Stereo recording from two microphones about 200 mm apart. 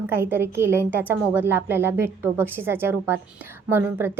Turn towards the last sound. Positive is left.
turn(degrees=-10)  # may be behind; listen again after turning